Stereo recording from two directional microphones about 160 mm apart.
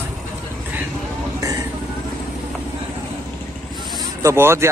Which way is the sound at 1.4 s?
20° right (ahead or behind).